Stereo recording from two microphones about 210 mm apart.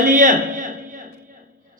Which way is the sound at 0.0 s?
40° right (ahead or behind).